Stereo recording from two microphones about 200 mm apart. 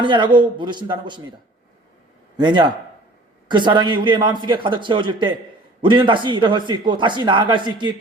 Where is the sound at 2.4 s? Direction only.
20° right (ahead or behind).